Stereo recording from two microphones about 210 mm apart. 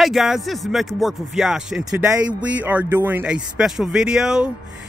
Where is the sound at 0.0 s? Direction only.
Centre (ahead or behind).